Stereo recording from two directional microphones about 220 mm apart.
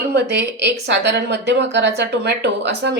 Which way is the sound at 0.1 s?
50° right (ahead or behind).